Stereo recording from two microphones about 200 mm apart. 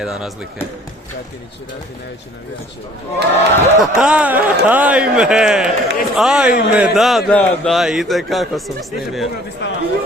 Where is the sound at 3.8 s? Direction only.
5° right (ahead or behind).